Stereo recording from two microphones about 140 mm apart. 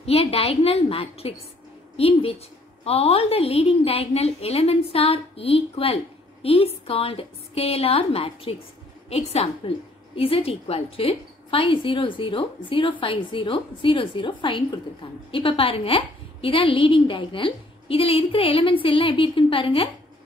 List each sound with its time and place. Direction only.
0.0 s a woman's voice: 45° left (ahead or behind)